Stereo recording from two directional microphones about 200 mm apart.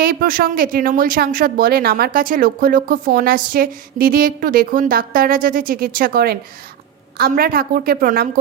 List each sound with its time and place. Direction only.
0.0 s speech: 50° right (ahead or behind)